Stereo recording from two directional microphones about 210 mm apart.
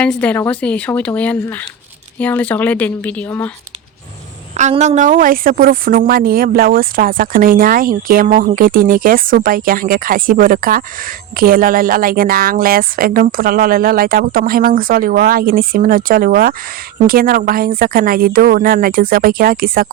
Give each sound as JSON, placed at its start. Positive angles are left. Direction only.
{"t": 0.0, "sound": "speech", "side_deg": 5}
{"t": 4.5, "sound": "a woman's voice", "side_deg": -35}